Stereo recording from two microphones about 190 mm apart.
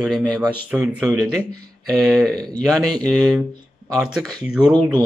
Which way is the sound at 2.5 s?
Centre (ahead or behind).